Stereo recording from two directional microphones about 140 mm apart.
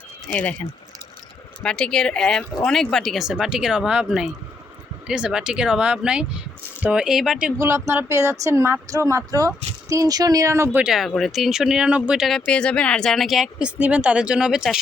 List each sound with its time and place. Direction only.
1.6 s speech: 5° left (ahead or behind)
7.6 s speech: 20° right (ahead or behind)
10.8 s speech: centre (ahead or behind)
12.5 s speech: 5° left (ahead or behind)